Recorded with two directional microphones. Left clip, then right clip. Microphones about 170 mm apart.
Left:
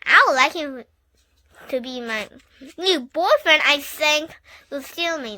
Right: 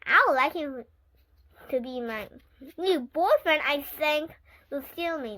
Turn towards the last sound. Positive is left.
turn(degrees=30)  # may be behind; listen again after turning